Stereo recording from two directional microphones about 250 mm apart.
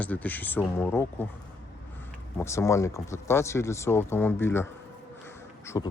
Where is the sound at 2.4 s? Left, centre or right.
Centre.